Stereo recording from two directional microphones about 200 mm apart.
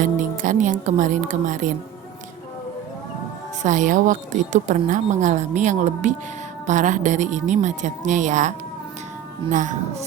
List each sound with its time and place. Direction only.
0.0 s a woman's voice: 40° right (ahead or behind)
3.6 s a woman's voice: 40° right (ahead or behind)